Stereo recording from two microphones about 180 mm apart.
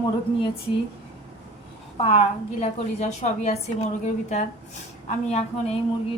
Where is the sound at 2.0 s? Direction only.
35° left (ahead or behind).